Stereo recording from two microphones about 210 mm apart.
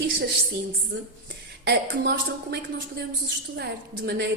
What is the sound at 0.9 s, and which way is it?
A woman's voice, 50° right (ahead or behind).